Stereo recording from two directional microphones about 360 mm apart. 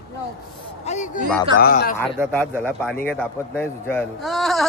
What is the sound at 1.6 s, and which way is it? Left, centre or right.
Speech, left.